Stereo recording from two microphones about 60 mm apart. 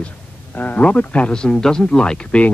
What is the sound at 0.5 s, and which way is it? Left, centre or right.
Speech, left.